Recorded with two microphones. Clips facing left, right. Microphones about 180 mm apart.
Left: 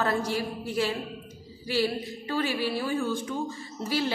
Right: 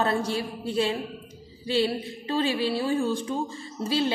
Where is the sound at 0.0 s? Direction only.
25° right (ahead or behind).